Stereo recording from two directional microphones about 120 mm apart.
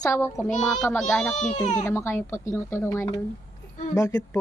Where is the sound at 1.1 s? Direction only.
5° left (ahead or behind).